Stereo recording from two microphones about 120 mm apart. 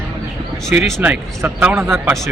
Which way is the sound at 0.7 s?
5° right (ahead or behind).